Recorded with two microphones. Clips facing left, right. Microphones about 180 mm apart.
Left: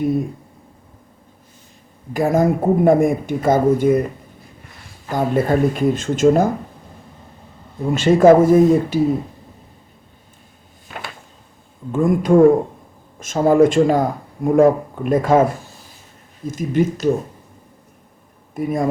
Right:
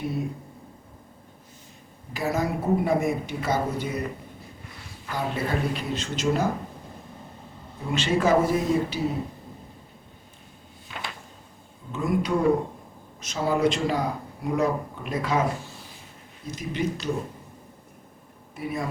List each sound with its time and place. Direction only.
2.1 s speech: 50° left (ahead or behind)
5.0 s speech: 45° left (ahead or behind)
7.9 s speech: 50° left (ahead or behind)
10.9 s a sound: 45° left (ahead or behind)
11.9 s speech: 50° left (ahead or behind)
16.5 s speech: 50° left (ahead or behind)
18.5 s speech: 45° left (ahead or behind)